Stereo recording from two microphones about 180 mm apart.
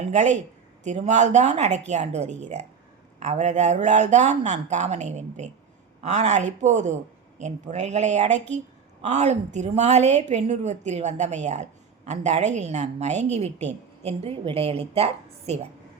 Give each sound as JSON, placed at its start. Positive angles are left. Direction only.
{"t": 0.1, "sound": "a woman's voice", "side_deg": -40}